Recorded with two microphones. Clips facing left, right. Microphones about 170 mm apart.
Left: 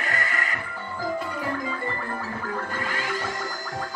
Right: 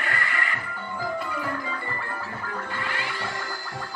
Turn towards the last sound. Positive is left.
turn(degrees=45)  # may be behind; listen again after turning